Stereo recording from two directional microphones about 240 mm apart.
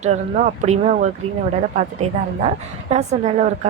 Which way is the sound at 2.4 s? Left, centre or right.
Right.